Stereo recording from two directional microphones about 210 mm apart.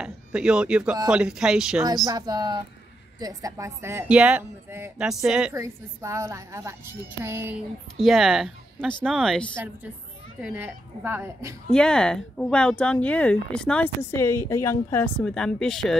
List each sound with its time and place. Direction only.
0.0 s speech: 5° right (ahead or behind)
2.0 s a woman's voice: 20° right (ahead or behind); by 5.5 s 5° right (ahead or behind)
5.5 s a woman's voice: 15° right (ahead or behind)
11.7 s speech: 5° left (ahead or behind)